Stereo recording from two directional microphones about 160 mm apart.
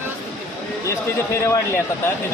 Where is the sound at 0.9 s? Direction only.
15° left (ahead or behind).